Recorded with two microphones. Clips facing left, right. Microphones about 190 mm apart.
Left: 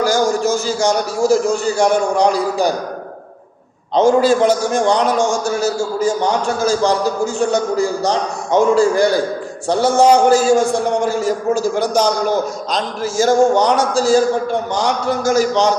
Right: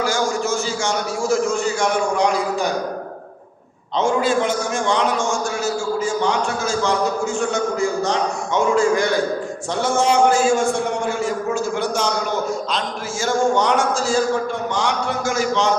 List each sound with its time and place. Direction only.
0.0 s a man's voice: 35° left (ahead or behind)
3.9 s a man's voice: 40° left (ahead or behind)